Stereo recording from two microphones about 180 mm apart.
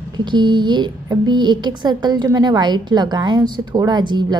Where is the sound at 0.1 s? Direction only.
25° right (ahead or behind).